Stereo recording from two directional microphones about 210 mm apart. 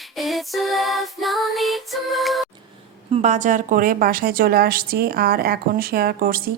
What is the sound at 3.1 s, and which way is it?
A woman's voice, 30° right (ahead or behind).